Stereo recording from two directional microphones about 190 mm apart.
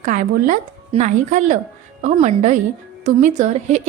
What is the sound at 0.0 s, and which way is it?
A woman's voice, 45° right (ahead or behind).